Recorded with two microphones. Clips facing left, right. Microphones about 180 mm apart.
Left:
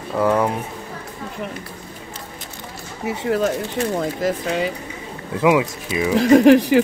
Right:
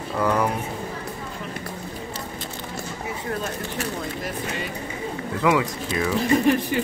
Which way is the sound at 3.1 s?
80° left.